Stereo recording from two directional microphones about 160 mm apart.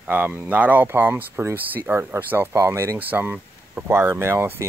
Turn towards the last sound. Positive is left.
turn(degrees=-15)  # may be behind; listen again after turning